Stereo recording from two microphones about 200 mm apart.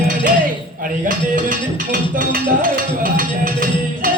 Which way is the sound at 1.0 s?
45° right (ahead or behind).